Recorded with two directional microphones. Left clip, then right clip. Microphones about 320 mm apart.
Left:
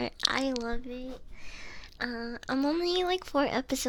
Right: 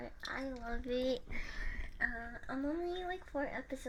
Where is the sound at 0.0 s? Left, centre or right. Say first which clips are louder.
Left 14 dB; left.